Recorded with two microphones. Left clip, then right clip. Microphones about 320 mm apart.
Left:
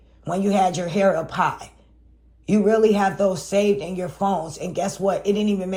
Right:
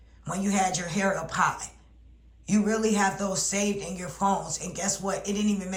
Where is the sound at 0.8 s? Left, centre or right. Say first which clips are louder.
Left 8 dB; centre.